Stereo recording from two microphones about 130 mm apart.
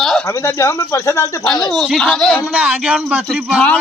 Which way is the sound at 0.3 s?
20° left (ahead or behind).